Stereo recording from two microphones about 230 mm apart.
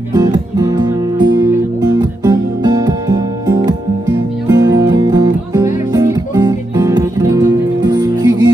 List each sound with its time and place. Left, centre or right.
0.1 s music: centre